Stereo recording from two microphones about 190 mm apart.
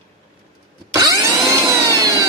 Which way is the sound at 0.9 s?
20° right (ahead or behind).